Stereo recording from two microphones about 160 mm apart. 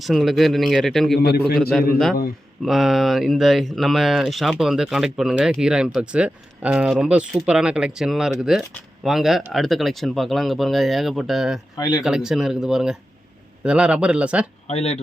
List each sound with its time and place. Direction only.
0.0 s speech: centre (ahead or behind)
1.2 s a man's voice: 80° left
1.7 s speech: 5° left (ahead or behind)
11.8 s speech: 25° left (ahead or behind)
12.0 s speech: 5° right (ahead or behind)
14.7 s speech: 40° left (ahead or behind)